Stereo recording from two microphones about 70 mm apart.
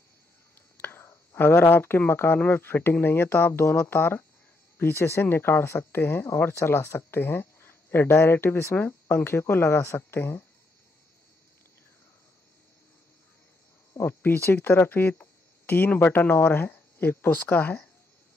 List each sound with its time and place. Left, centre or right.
0.7 s speech: left
13.9 s speech: left